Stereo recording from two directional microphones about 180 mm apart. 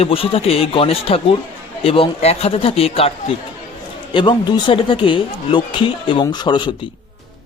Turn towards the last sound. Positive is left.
turn(degrees=25)  # may be behind; listen again after turning